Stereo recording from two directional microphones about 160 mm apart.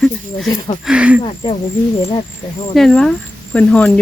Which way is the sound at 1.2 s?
35° left (ahead or behind).